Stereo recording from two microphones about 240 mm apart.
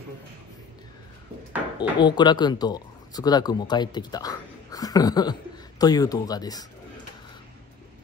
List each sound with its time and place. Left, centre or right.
1.8 s speech: centre